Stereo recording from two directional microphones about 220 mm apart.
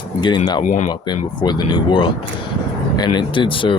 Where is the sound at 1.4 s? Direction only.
20° left (ahead or behind).